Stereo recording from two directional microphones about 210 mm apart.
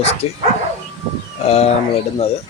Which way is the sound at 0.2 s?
30° left (ahead or behind).